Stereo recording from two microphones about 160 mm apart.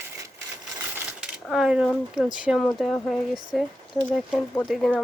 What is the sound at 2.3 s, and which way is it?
Speech, 5° right (ahead or behind).